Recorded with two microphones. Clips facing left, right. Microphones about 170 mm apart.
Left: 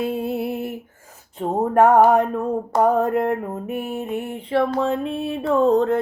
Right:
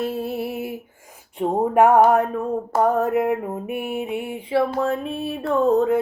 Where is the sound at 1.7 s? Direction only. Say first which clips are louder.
Left 1 dB; 10° right (ahead or behind).